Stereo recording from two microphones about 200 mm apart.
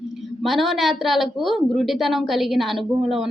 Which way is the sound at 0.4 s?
Centre (ahead or behind).